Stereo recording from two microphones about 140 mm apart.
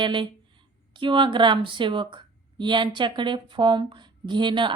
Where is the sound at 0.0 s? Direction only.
35° right (ahead or behind).